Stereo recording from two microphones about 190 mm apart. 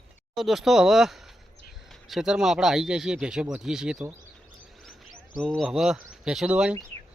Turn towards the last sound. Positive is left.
turn(degrees=-5)  # may be behind; listen again after turning